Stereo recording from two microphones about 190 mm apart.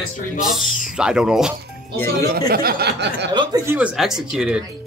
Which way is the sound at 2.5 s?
50° right (ahead or behind).